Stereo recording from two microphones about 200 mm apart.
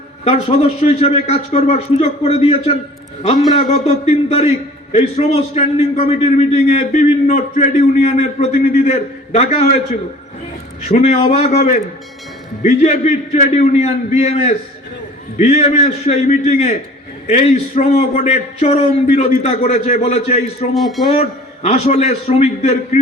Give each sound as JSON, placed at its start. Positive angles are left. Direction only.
{"t": 0.3, "sound": "a man's voice", "side_deg": 30}
{"t": 10.8, "sound": "a man's voice", "side_deg": 35}
{"t": 20.7, "sound": "speech", "side_deg": 0}
{"t": 21.2, "sound": "a man's voice", "side_deg": 30}